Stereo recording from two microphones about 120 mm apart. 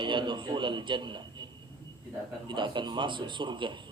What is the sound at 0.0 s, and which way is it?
A man's voice, 40° right (ahead or behind).